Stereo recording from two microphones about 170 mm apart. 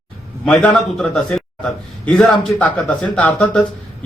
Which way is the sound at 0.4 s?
5° left (ahead or behind).